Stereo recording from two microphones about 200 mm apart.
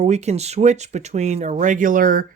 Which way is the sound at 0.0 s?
35° right (ahead or behind).